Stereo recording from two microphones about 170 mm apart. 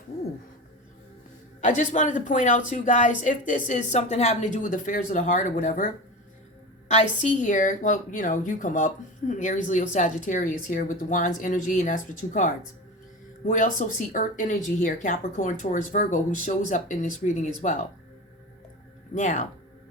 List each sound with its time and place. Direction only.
1.6 s a woman's voice: 45° left (ahead or behind)
6.9 s a woman's voice: 45° left (ahead or behind)
19.1 s a woman's voice: 45° left (ahead or behind)